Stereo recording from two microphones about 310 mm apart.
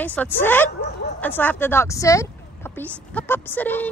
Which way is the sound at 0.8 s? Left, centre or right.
Left.